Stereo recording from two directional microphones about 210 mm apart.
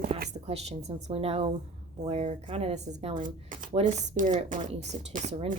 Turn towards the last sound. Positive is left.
turn(degrees=-35)  # may be behind; listen again after turning